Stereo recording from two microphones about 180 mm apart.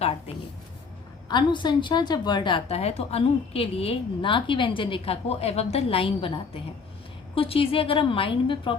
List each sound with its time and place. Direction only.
1.3 s a woman's voice: 25° left (ahead or behind)